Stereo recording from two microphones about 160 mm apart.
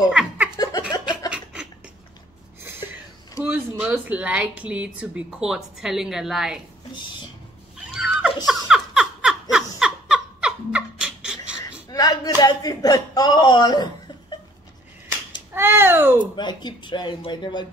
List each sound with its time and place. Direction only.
0.1 s music: 10° right (ahead or behind)
0.6 s music: 25° left (ahead or behind)
1.3 s a sound: 5° right (ahead or behind)
3.4 s speech: 10° right (ahead or behind)
7.9 s a sound: 5° right (ahead or behind)
8.5 s laughter: 5° right (ahead or behind)
11.9 s a sound: 20° left (ahead or behind)
15.5 s babbling: 15° right (ahead or behind)
16.3 s speech: 30° left (ahead or behind)